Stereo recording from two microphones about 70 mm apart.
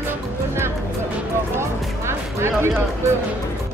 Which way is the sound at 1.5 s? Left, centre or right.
Right.